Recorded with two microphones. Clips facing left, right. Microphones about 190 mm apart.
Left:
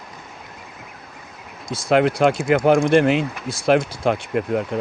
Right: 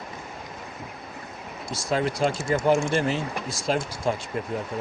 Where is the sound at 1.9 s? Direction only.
65° left (ahead or behind).